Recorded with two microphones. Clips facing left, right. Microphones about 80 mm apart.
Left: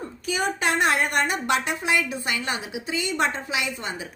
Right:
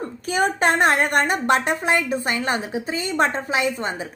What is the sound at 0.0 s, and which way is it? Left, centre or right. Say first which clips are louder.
Speech: right 5 dB; right.